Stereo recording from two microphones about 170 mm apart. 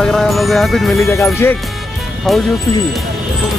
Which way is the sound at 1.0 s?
15° left (ahead or behind).